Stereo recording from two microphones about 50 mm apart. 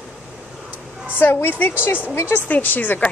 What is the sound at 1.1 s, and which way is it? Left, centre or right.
Speech, left.